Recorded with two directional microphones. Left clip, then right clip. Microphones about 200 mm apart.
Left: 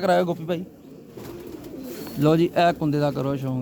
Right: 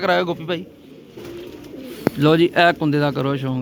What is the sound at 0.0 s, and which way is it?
Speech, 15° left (ahead or behind).